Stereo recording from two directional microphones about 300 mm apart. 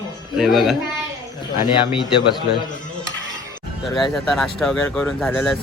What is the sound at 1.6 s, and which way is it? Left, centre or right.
Speech, centre.